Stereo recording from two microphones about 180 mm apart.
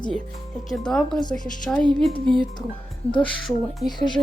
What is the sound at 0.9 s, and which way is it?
Speech, 5° left (ahead or behind).